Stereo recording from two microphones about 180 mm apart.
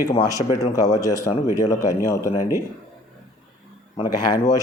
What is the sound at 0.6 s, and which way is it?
Speech, 20° left (ahead or behind).